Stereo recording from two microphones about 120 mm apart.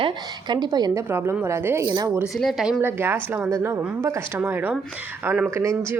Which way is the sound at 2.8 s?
20° right (ahead or behind).